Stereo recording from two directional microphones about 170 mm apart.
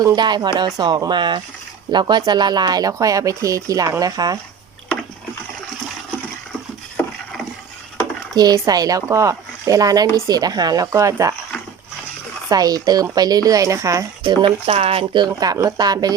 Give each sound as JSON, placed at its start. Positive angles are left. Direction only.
{"t": 0.0, "sound": "speech", "side_deg": -25}
{"t": 8.4, "sound": "speech", "side_deg": -25}
{"t": 12.5, "sound": "speech", "side_deg": -20}
{"t": 15.3, "sound": "speech", "side_deg": -20}